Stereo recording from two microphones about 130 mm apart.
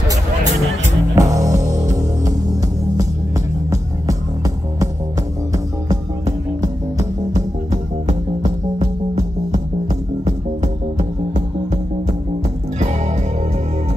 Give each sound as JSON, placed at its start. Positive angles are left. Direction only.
{"t": 1.1, "sound": "music", "side_deg": -25}
{"t": 10.2, "sound": "music", "side_deg": -65}